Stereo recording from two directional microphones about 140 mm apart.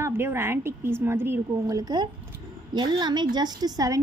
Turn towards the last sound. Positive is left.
turn(degrees=-25)  # may be behind; listen again after turning